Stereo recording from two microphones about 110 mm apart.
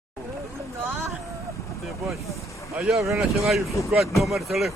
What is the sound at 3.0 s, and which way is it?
Speech, centre (ahead or behind).